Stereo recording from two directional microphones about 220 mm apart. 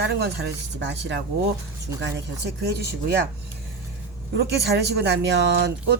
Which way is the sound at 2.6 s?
50° right (ahead or behind).